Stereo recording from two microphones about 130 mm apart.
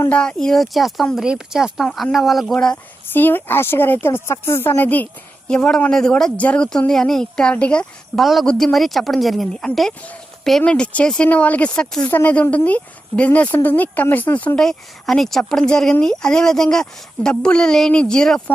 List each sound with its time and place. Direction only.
0.1 s speech: 5° left (ahead or behind)
3.1 s speech: 15° left (ahead or behind)